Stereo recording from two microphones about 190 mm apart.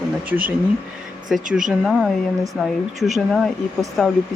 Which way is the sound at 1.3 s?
Centre (ahead or behind).